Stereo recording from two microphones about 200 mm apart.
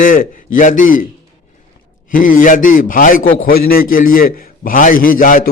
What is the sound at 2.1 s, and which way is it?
A man's voice, 45° left (ahead or behind).